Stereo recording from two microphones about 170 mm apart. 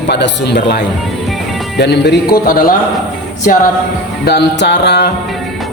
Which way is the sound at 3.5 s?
55° left (ahead or behind).